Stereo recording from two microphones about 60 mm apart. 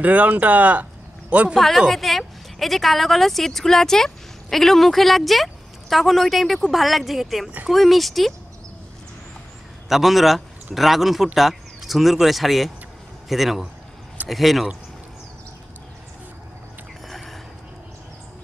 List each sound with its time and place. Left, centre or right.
0.0 s speech: right
1.5 s a woman's voice: centre
9.8 s a man's voice: centre
17.1 s a sound: centre